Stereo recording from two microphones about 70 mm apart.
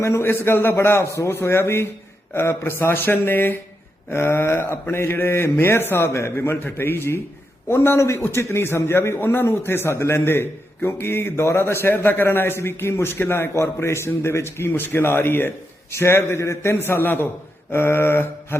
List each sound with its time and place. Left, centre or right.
0.0 s a man's voice: left